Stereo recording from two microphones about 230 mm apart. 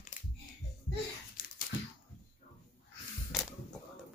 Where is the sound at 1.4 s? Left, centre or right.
Left.